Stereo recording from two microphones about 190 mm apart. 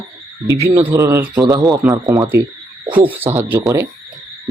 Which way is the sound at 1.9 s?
20° right (ahead or behind).